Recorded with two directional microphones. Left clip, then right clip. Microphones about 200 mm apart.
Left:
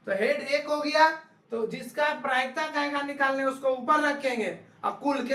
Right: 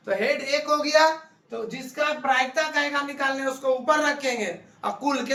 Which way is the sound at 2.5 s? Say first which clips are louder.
Right 5 dB; 30° right (ahead or behind).